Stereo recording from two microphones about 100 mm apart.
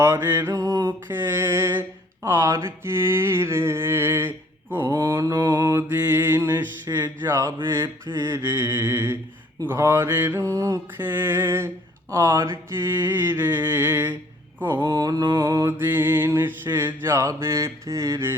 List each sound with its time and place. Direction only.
0.0 s mantra: 25° right (ahead or behind)
0.4 s a sound: 35° right (ahead or behind)
1.0 s mantra: 20° right (ahead or behind); by 5.5 s 40° right (ahead or behind)
5.5 s mantra: 25° right (ahead or behind)
11.0 s mantra: 20° right (ahead or behind)
14.9 s a sound: 40° right (ahead or behind)
15.4 s mantra: 30° right (ahead or behind)